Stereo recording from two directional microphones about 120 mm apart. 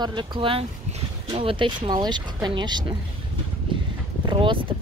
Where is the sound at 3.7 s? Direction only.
45° right (ahead or behind).